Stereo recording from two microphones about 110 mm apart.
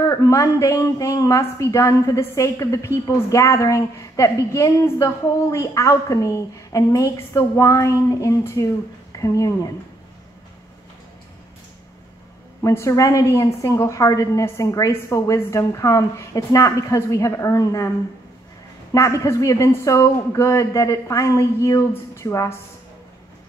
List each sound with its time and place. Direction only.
0.0 s a woman's voice: 30° left (ahead or behind)
12.6 s a woman's voice: 30° left (ahead or behind)
18.9 s a woman's voice: 25° left (ahead or behind)